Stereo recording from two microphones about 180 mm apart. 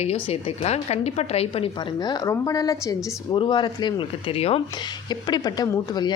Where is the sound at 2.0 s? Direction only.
20° left (ahead or behind).